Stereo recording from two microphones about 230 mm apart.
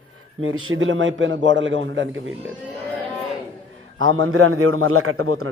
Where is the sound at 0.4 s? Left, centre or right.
Right.